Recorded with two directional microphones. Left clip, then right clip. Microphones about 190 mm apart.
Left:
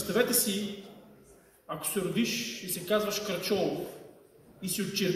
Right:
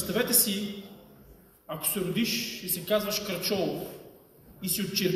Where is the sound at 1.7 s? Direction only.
15° left (ahead or behind).